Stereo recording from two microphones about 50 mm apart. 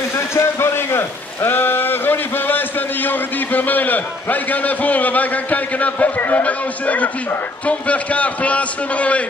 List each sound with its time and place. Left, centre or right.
0.1 s a man's voice: left